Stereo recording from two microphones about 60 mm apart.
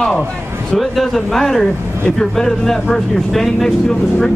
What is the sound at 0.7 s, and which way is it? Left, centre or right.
Speech, centre.